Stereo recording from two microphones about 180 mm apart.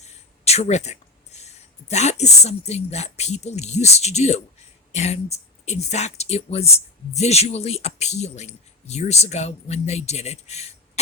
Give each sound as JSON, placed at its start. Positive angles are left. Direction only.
{"t": 0.0, "sound": "speech", "side_deg": 35}